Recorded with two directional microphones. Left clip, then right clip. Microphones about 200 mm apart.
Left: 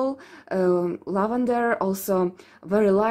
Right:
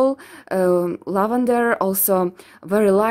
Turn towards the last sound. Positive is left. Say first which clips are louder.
# right 4 dB
turn(degrees=-30)  # may be behind; listen again after turning